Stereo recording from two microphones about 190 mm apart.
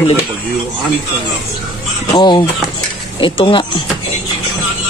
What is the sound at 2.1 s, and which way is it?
Speech, 25° left (ahead or behind).